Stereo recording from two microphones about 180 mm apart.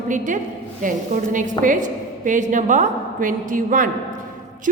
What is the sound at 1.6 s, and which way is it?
A woman's voice, 45° right (ahead or behind).